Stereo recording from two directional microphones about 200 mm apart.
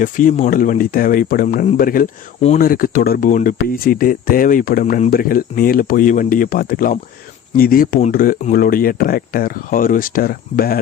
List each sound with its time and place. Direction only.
0.0 s speech: 40° left (ahead or behind)